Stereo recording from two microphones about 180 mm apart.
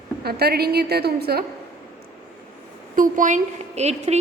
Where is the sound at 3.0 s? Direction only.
45° right (ahead or behind).